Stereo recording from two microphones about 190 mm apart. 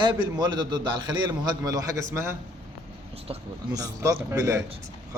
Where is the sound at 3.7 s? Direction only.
20° right (ahead or behind).